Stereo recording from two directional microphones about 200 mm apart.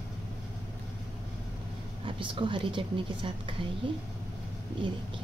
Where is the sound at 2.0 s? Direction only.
25° right (ahead or behind).